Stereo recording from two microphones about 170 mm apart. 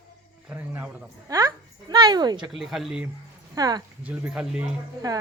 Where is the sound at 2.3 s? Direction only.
Centre (ahead or behind).